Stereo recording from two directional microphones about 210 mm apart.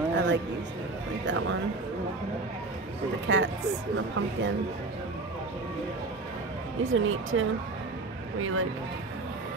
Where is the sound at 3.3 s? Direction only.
60° right (ahead or behind).